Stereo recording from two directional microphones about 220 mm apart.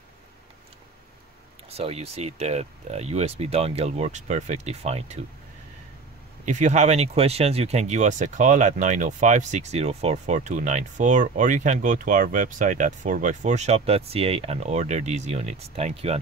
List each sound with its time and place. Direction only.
1.7 s speech: 30° right (ahead or behind)
6.4 s speech: 35° right (ahead or behind)